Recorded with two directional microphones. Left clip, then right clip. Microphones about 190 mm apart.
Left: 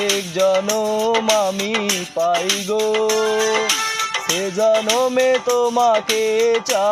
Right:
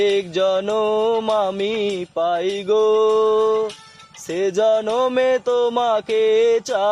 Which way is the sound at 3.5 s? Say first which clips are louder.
Left 1 dB; 45° left (ahead or behind).